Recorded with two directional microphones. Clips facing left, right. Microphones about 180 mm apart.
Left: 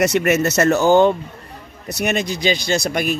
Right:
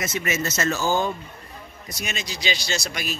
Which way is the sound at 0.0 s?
70° left (ahead or behind).